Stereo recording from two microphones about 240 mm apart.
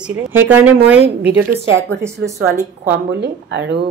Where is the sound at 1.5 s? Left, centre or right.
Right.